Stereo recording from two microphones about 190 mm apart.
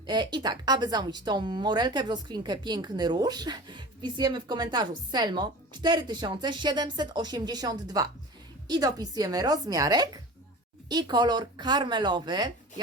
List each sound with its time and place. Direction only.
0.0 s a woman's voice: 25° right (ahead or behind)